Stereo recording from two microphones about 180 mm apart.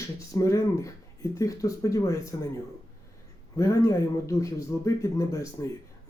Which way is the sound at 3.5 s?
15° left (ahead or behind).